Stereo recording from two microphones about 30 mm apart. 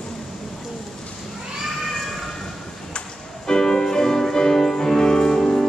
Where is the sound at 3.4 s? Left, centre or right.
Left.